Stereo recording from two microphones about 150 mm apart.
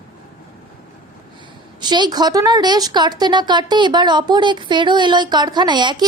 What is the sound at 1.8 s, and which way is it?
Speech, 30° right (ahead or behind).